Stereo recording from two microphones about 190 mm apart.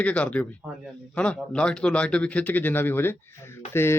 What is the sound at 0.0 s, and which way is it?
Speech, 5° left (ahead or behind).